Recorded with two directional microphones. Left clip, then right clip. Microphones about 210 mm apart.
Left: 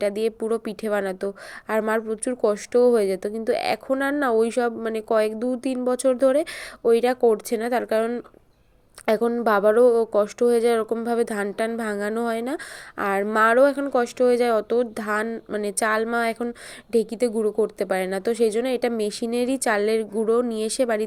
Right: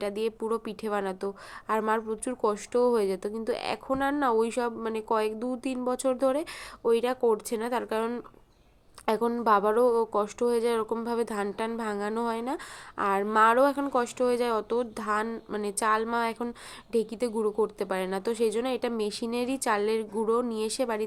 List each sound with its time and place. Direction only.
0.0 s a woman's voice: 15° left (ahead or behind)